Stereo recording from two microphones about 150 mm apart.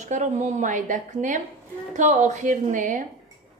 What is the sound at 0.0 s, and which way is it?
A woman's voice, 55° right (ahead or behind).